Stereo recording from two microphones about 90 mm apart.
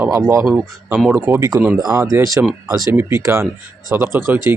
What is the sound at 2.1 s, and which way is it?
Speech, 35° right (ahead or behind).